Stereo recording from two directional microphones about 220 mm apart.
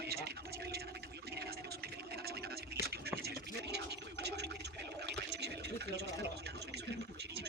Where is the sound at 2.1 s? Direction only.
45° right (ahead or behind).